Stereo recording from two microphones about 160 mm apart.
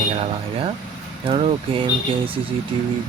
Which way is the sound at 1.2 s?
40° right (ahead or behind).